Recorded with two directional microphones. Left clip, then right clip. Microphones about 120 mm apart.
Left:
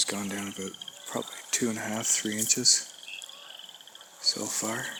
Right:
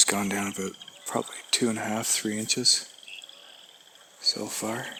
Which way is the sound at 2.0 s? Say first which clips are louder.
Even; 90° right.